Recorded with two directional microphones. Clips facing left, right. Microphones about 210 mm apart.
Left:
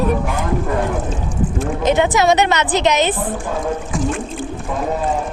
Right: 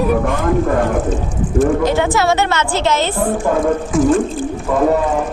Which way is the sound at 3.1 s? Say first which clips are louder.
Right 7 dB; 55° right (ahead or behind).